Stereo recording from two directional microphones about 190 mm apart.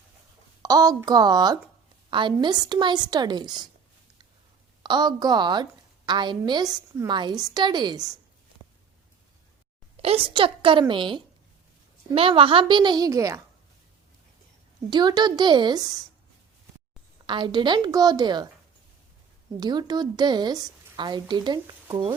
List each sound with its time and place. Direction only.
0.6 s a woman's voice: 20° right (ahead or behind)
4.8 s a woman's voice: 20° right (ahead or behind)
10.0 s a woman's voice: 30° right (ahead or behind)
14.8 s a woman's voice: 20° right (ahead or behind)
17.2 s a woman's voice: 25° right (ahead or behind)
19.5 s a woman's voice: 20° right (ahead or behind)